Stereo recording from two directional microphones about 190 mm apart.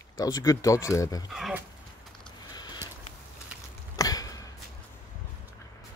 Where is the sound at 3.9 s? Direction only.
20° left (ahead or behind).